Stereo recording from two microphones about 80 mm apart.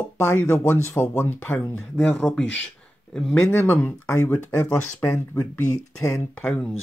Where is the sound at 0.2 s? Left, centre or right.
Left.